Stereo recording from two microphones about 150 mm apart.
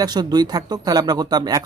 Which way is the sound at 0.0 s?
25° right (ahead or behind).